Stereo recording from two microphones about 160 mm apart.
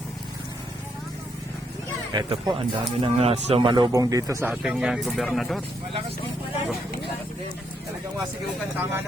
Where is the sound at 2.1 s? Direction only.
30° right (ahead or behind).